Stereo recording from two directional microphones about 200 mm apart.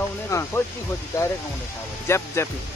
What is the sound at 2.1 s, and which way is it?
Speech, 10° left (ahead or behind).